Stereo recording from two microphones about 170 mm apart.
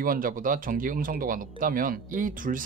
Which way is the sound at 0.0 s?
55° right (ahead or behind).